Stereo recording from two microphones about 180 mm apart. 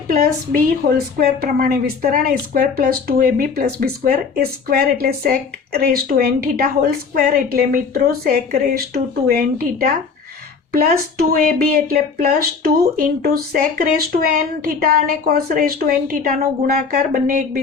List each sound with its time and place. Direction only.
0.1 s speech: 55° right (ahead or behind)